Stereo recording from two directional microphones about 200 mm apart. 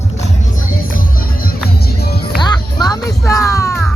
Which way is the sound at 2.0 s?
50° left (ahead or behind).